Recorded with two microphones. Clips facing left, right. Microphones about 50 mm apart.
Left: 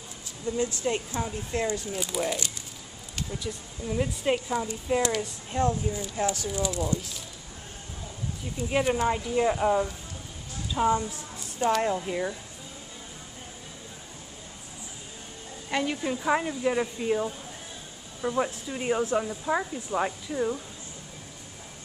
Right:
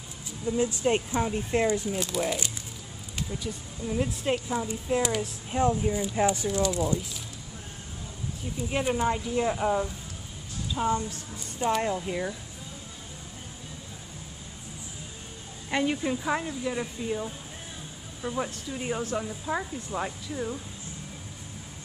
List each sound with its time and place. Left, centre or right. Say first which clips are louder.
0.5 s speech: right 2 dB; centre
2.0 s speech: right 1 dB; centre
3.8 s a woman's voice: left 1 dB; centre
5.0 s speech: left 1 dB; centre
8.6 s a woman's voice: left 2 dB; centre
11.6 s a woman's voice: left 2 dB; centre
15.7 s a woman's voice: right 1 dB; centre
16.4 s speech: left 4 dB; centre